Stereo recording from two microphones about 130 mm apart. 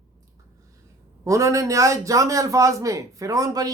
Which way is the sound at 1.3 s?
25° right (ahead or behind).